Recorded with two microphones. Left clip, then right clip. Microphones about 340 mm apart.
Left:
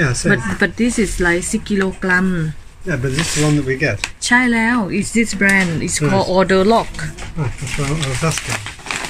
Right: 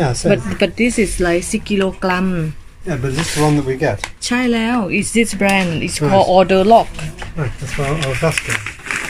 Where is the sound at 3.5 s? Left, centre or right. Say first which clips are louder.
Right 1 dB; right.